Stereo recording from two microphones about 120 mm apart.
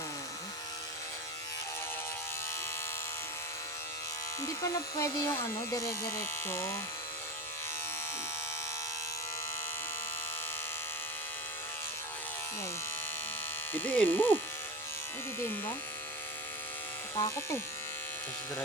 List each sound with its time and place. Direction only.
4.4 s speech: 25° left (ahead or behind)
13.7 s speech: 15° left (ahead or behind)
17.2 s speech: 25° left (ahead or behind)